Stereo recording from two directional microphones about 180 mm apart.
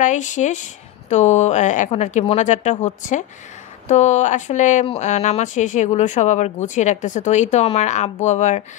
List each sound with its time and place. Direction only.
0.0 s speech: 45° left (ahead or behind)